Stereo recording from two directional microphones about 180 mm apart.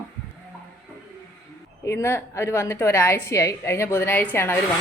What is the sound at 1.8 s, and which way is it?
A woman's voice, 15° left (ahead or behind).